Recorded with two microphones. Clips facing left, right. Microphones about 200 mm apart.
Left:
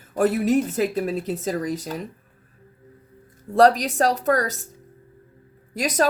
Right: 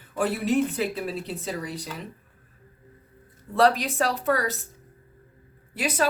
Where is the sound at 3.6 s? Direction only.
40° left (ahead or behind).